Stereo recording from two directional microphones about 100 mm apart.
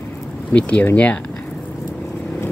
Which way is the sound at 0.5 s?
10° left (ahead or behind).